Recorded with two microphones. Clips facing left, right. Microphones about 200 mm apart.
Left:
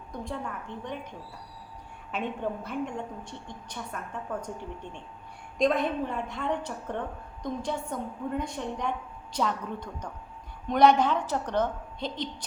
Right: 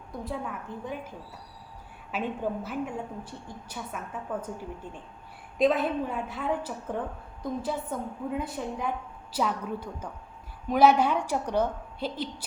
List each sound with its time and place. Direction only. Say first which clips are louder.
0.1 s a woman's voice: right 1 dB; 5° right (ahead or behind)
2.1 s a woman's voice: right 1 dB; 5° right (ahead or behind)